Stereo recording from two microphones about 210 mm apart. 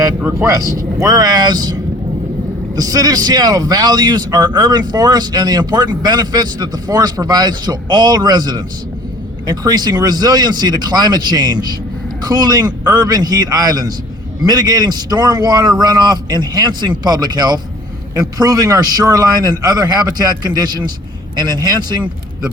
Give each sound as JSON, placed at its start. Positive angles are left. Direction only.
{"t": 0.0, "sound": "speech", "side_deg": -15}
{"t": 2.7, "sound": "a man's voice", "side_deg": -15}